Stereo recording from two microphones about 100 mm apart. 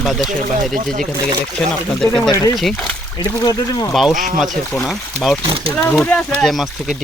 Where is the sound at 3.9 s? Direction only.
Centre (ahead or behind).